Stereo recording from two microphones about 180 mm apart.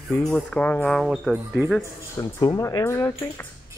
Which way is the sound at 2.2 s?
20° left (ahead or behind).